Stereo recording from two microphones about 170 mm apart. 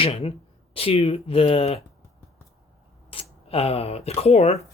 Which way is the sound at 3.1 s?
30° left (ahead or behind).